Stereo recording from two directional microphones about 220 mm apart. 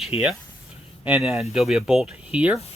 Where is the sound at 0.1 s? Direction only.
25° left (ahead or behind).